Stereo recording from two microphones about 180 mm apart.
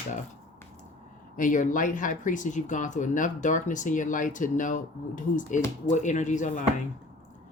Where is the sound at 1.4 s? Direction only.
45° left (ahead or behind).